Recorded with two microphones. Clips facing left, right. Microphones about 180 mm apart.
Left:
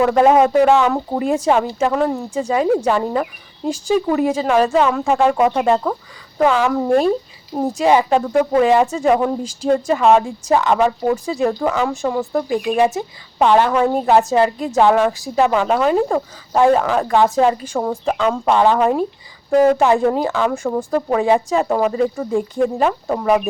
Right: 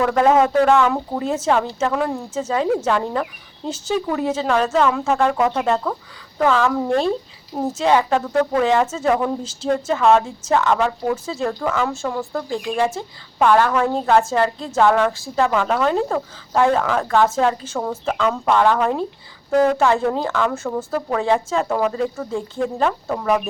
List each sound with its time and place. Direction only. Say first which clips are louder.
0.0 s speech: left 3 dB; 15° left (ahead or behind)
2.4 s speech: left 3 dB; 10° left (ahead or behind)